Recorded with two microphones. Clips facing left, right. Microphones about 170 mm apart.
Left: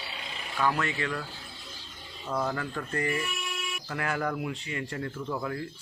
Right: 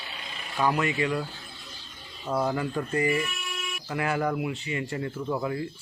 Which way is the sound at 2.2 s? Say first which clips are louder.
Right 4 dB; 15° right (ahead or behind).